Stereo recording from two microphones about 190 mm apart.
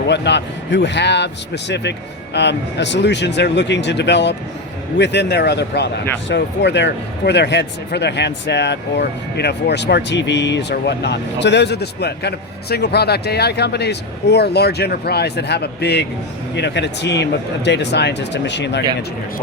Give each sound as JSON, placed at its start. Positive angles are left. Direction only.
{"t": 0.1, "sound": "speech", "side_deg": 65}